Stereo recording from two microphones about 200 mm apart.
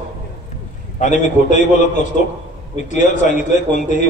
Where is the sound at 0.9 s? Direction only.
40° left (ahead or behind).